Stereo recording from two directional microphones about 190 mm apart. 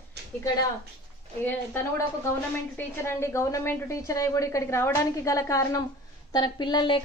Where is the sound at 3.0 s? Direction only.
15° left (ahead or behind).